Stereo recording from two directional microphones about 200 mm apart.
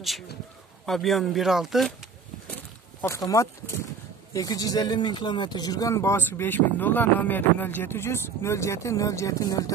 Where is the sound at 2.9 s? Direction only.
15° left (ahead or behind).